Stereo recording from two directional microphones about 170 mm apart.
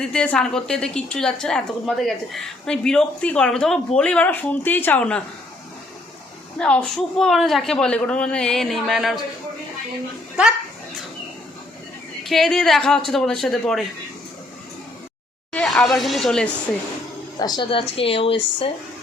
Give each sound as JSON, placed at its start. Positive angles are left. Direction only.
{"t": 0.0, "sound": "a woman's voice", "side_deg": 5}
{"t": 6.6, "sound": "a woman's voice", "side_deg": 5}
{"t": 12.2, "sound": "a woman's voice", "side_deg": 0}
{"t": 15.5, "sound": "speech", "side_deg": 5}
{"t": 17.4, "sound": "a woman's voice", "side_deg": 25}